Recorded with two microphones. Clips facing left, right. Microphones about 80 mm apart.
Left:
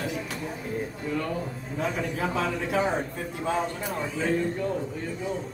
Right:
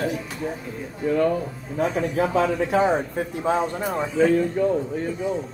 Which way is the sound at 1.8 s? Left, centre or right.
Right.